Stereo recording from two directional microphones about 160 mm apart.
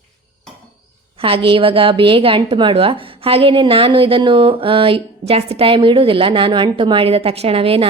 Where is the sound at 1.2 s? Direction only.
35° right (ahead or behind).